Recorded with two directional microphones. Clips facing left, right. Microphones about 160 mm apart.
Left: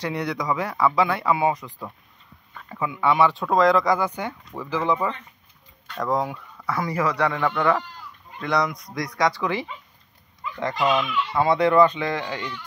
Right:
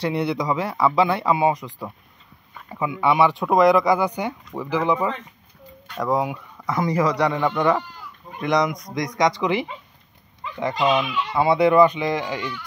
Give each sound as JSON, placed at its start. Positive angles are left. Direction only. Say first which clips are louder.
{"t": 0.0, "sound": "speech", "louder": "right 4 dB", "side_deg": -25}